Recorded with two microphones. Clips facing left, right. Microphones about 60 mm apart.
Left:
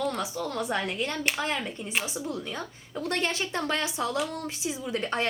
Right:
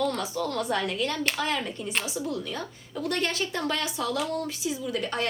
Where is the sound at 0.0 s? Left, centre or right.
Centre.